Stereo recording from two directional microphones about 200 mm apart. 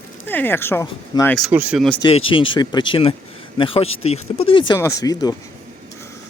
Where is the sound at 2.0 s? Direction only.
25° left (ahead or behind).